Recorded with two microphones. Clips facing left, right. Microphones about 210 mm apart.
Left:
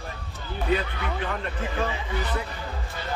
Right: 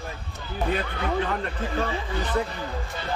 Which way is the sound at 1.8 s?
35° right (ahead or behind).